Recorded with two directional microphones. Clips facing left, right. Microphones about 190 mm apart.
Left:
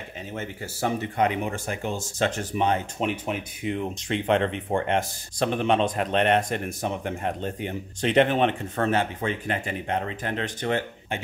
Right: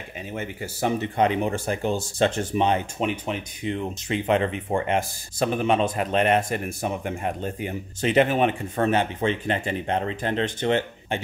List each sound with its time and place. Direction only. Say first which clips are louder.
0.3 s speech: right 3 dB; 15° right (ahead or behind)
3.0 s speech: right 1 dB; centre (ahead or behind); by 11.1 s 25° right (ahead or behind)